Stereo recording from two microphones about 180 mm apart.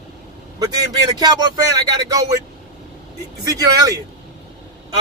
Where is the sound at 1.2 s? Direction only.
20° right (ahead or behind).